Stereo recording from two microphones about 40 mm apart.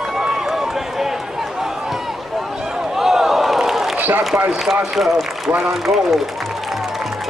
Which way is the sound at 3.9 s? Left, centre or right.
Right.